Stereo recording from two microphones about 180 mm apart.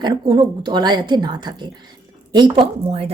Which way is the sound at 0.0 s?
25° right (ahead or behind).